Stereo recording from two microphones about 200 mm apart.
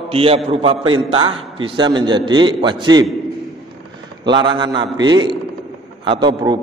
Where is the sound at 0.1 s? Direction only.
30° right (ahead or behind).